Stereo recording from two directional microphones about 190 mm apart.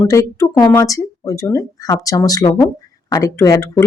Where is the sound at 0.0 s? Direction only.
15° left (ahead or behind).